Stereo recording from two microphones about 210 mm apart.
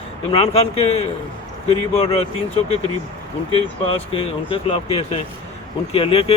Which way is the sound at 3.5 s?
25° left (ahead or behind).